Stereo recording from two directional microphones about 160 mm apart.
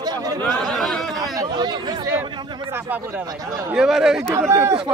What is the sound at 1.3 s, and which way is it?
Speech, 25° right (ahead or behind).